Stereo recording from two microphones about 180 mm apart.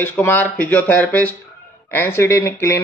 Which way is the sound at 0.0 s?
10° left (ahead or behind).